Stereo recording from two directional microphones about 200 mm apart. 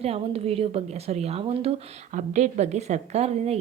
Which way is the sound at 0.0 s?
30° right (ahead or behind).